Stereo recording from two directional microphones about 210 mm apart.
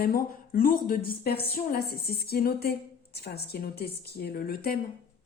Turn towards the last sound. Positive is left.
turn(degrees=45)  # may be behind; listen again after turning